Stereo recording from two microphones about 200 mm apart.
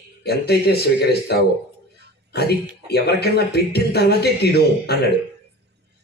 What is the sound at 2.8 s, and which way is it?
Speech, 55° left (ahead or behind).